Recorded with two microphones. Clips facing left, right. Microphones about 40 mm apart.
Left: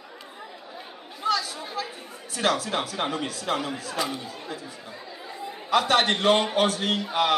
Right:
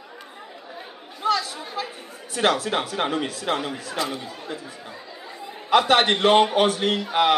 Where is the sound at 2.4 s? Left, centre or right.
Right.